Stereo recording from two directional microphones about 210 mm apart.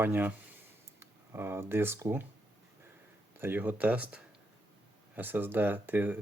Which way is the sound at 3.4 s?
10° right (ahead or behind).